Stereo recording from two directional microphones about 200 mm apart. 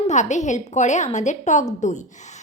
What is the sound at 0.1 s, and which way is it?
A woman's voice, 35° left (ahead or behind).